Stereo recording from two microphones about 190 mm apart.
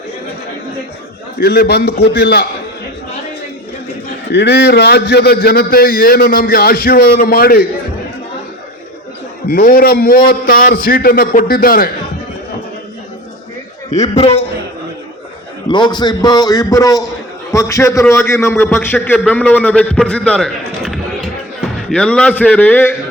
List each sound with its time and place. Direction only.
1.4 s a man's voice: 55° left (ahead or behind)
4.3 s a man's voice: 60° left (ahead or behind)
9.5 s a man's voice: 50° left (ahead or behind)
14.0 s a man's voice: 30° left (ahead or behind)
15.7 s a man's voice: 25° left (ahead or behind)